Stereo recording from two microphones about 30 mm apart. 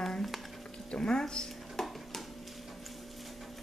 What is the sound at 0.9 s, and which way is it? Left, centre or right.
Speech, left.